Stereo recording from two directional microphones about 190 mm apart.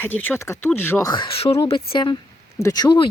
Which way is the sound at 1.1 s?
25° left (ahead or behind).